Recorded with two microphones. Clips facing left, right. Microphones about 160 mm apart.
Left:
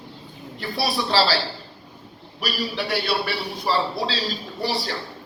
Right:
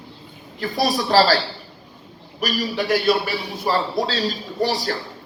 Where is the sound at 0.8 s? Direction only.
45° right (ahead or behind).